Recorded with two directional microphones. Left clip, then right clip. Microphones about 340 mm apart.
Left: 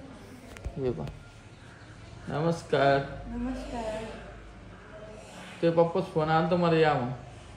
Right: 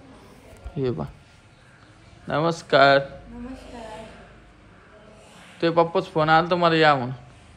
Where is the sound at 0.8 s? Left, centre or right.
Right.